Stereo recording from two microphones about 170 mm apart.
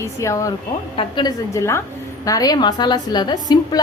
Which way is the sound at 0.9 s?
30° left (ahead or behind).